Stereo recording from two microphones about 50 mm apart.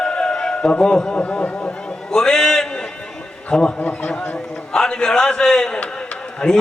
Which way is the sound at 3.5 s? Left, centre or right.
Centre.